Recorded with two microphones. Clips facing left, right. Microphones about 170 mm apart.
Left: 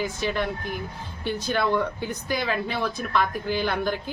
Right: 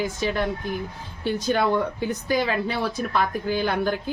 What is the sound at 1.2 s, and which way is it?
Speech, 40° right (ahead or behind).